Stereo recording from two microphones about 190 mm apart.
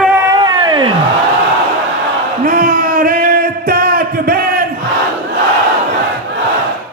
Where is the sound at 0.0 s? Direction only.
10° right (ahead or behind).